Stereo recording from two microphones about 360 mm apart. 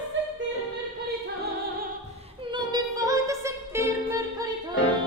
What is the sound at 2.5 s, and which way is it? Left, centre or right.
Music, centre.